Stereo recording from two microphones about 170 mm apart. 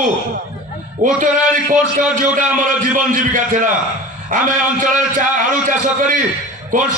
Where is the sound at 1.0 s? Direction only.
50° right (ahead or behind).